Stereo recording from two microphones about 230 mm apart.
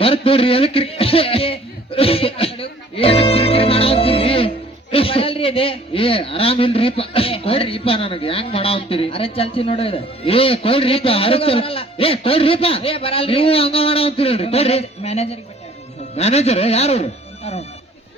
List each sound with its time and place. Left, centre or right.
0.0 s speech: left